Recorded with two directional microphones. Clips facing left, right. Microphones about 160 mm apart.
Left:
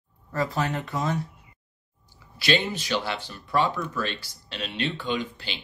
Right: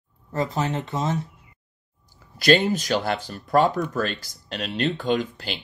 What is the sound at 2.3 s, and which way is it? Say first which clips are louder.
Speech: right 7 dB; 45° right (ahead or behind).